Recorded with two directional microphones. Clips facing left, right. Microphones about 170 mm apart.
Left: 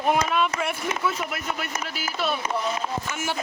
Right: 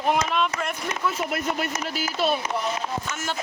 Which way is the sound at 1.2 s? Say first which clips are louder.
Right 4 dB; 35° right (ahead or behind).